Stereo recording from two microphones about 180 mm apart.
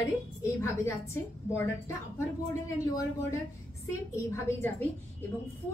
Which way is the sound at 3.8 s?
15° left (ahead or behind).